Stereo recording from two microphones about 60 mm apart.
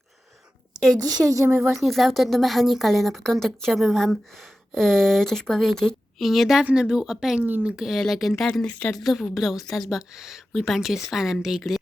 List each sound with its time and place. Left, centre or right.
1.1 s speech: right
1.7 s a woman's voice: centre
9.9 s speech: centre